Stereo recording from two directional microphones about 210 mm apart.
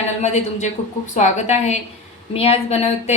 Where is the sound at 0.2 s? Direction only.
35° left (ahead or behind).